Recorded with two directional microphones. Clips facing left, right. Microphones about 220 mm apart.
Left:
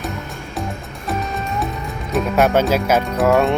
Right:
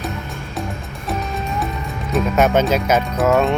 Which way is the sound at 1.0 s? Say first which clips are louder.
Left 1 dB; centre (ahead or behind).